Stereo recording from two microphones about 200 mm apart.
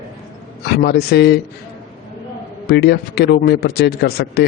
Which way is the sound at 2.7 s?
55° left (ahead or behind).